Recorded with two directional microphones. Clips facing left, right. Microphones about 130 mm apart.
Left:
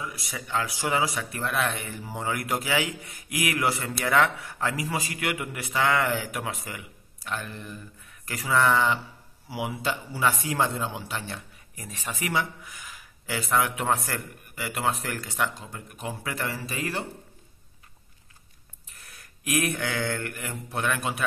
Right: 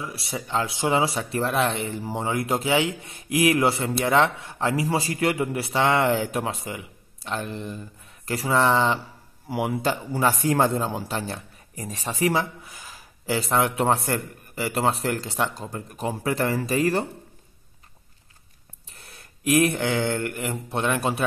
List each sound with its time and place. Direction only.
0.0 s speech: 30° right (ahead or behind)
9.5 s speech: 50° right (ahead or behind)
18.9 s a sound: 30° right (ahead or behind)